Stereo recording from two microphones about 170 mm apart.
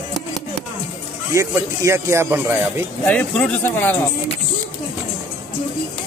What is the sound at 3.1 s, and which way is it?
Speech, 10° left (ahead or behind).